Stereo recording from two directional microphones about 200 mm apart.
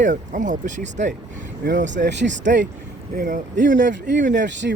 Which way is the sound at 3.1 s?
40° right (ahead or behind).